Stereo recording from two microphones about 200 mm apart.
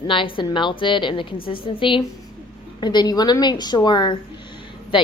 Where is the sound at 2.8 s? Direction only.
20° left (ahead or behind).